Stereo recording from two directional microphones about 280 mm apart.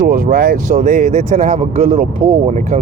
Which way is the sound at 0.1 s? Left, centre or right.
Right.